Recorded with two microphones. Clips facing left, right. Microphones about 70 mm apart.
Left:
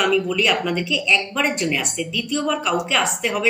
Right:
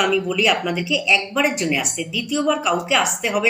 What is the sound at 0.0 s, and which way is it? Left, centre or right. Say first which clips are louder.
A woman's voice: even; centre.